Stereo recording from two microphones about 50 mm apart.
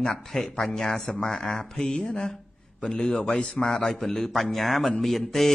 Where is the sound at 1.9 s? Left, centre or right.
Centre.